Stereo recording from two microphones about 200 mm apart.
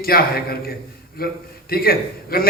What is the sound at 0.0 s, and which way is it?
A man's voice, 50° left (ahead or behind).